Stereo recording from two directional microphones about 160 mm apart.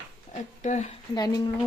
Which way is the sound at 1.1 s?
25° left (ahead or behind).